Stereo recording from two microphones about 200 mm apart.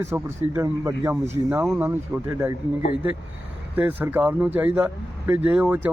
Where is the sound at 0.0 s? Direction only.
15° right (ahead or behind).